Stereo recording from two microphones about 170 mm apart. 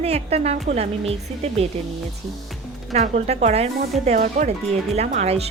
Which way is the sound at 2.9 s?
40° right (ahead or behind).